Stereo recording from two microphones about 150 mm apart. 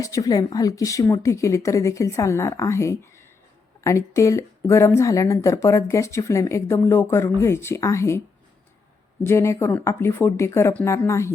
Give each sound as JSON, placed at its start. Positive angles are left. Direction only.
{"t": 0.0, "sound": "speech", "side_deg": 25}
{"t": 9.2, "sound": "speech", "side_deg": 20}